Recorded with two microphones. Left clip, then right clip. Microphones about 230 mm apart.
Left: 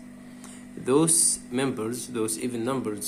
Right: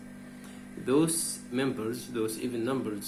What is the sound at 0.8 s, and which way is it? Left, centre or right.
Speech, left.